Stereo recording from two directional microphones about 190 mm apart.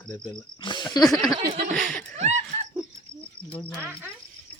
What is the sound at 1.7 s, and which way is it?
Chuckle, 5° left (ahead or behind).